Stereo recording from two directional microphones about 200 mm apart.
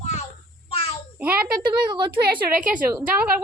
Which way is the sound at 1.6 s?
20° right (ahead or behind).